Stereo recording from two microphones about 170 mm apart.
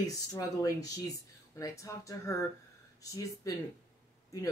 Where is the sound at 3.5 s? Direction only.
20° left (ahead or behind).